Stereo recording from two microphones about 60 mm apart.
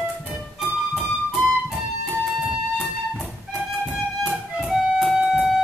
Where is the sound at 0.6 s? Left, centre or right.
Centre.